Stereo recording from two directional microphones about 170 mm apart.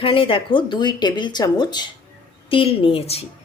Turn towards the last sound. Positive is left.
turn(degrees=35)  # may be behind; listen again after turning